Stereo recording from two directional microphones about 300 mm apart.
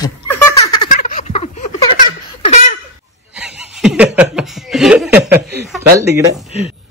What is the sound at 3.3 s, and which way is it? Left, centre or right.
Snicker, centre.